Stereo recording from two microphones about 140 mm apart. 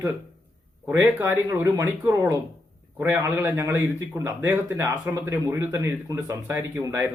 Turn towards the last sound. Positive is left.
turn(degrees=-20)  # may be behind; listen again after turning